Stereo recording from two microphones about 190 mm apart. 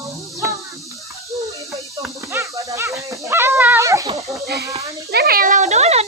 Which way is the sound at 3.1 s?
15° right (ahead or behind).